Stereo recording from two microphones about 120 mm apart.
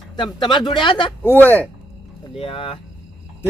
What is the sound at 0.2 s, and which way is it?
Speech, 40° left (ahead or behind).